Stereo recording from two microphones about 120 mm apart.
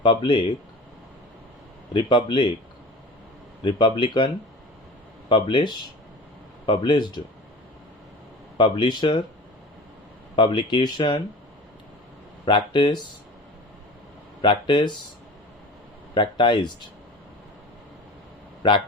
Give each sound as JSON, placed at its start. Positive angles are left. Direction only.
{"t": 0.0, "sound": "speech", "side_deg": 40}
{"t": 1.9, "sound": "speech", "side_deg": 40}
{"t": 3.6, "sound": "speech", "side_deg": 40}
{"t": 5.3, "sound": "speech", "side_deg": 40}
{"t": 8.5, "sound": "speech", "side_deg": 40}
{"t": 10.3, "sound": "speech", "side_deg": 40}
{"t": 12.5, "sound": "speech", "side_deg": 40}
{"t": 14.4, "sound": "speech", "side_deg": 40}
{"t": 16.1, "sound": "speech", "side_deg": 40}